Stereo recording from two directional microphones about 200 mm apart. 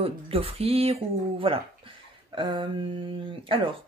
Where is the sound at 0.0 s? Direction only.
30° right (ahead or behind).